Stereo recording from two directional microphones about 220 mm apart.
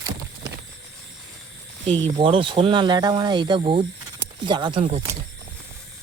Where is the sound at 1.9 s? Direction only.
25° right (ahead or behind).